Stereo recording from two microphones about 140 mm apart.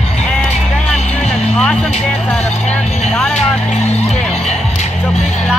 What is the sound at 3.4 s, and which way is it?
Music, 50° left (ahead or behind).